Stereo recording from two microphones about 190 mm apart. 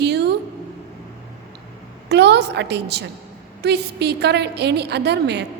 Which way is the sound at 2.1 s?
65° right (ahead or behind).